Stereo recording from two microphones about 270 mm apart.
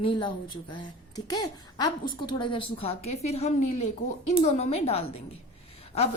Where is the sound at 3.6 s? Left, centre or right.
Left.